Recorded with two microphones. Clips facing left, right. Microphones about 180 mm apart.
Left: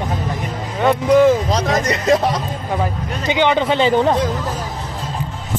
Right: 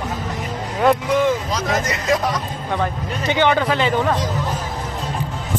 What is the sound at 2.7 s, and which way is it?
Speech, 15° left (ahead or behind).